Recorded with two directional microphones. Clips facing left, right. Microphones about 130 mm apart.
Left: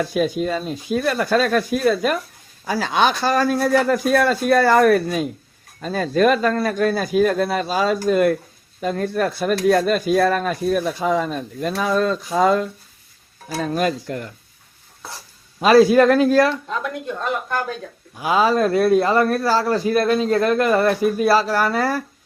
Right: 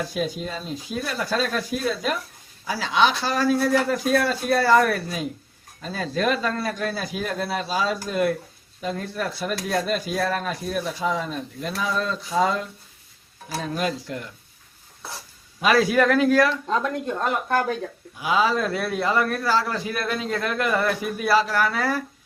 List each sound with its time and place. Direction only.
0.1 s speech: 55° left (ahead or behind)
15.6 s a man's voice: 30° left (ahead or behind)
18.2 s a man's voice: 45° left (ahead or behind)